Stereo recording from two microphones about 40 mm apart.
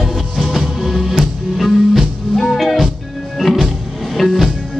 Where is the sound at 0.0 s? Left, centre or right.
Centre.